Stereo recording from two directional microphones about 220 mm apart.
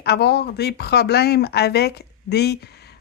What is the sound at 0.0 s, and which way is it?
A woman's voice, 50° left (ahead or behind).